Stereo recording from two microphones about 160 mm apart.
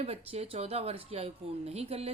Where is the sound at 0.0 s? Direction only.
40° right (ahead or behind).